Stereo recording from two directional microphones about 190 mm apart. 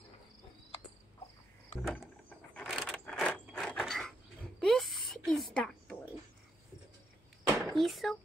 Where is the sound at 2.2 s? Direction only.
5° left (ahead or behind).